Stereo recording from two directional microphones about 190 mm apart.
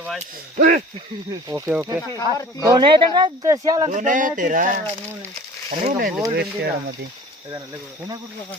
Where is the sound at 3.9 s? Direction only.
40° right (ahead or behind).